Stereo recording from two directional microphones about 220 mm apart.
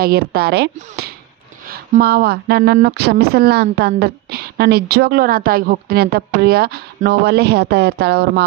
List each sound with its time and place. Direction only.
0.0 s speech: 45° right (ahead or behind)